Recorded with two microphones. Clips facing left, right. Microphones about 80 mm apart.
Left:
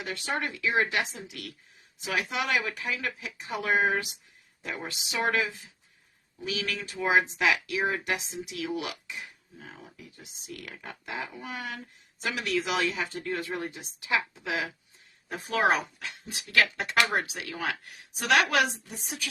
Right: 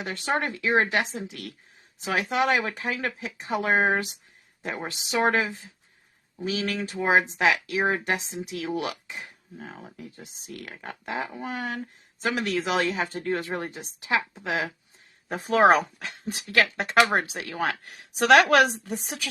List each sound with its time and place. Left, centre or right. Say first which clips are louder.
0.0 s speech: right 5 dB; right
16.5 s speech: right 2 dB; right